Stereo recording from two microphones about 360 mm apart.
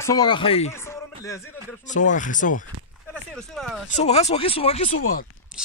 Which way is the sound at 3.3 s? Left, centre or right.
Centre.